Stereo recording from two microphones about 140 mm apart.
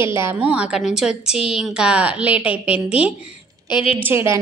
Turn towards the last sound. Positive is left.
turn(degrees=-15)  # may be behind; listen again after turning